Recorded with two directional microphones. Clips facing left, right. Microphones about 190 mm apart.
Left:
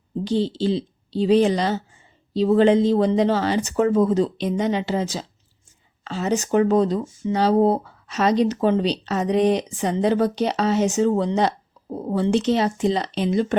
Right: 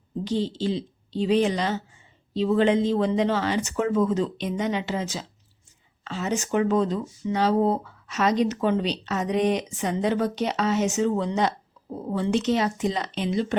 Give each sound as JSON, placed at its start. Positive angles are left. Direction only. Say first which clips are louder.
{"t": 0.3, "sound": "speech", "louder": "left 4 dB", "side_deg": 30}
{"t": 7.3, "sound": "speech", "louder": "left 4 dB", "side_deg": 35}
{"t": 13.3, "sound": "speech", "louder": "left 4 dB", "side_deg": 50}